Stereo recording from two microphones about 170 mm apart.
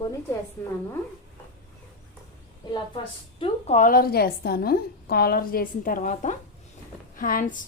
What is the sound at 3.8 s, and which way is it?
A woman's voice, 60° left (ahead or behind).